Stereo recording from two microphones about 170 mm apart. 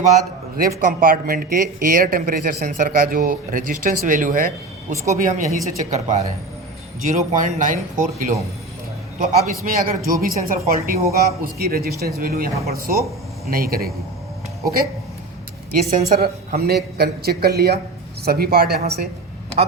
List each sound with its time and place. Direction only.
0.9 s a man's voice: 55° right (ahead or behind)
15.7 s speech: 60° right (ahead or behind)